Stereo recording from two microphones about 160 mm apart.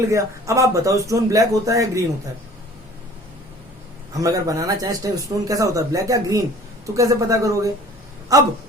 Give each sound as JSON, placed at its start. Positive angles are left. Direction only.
{"t": 0.1, "sound": "speech", "side_deg": -20}
{"t": 4.1, "sound": "speech", "side_deg": -20}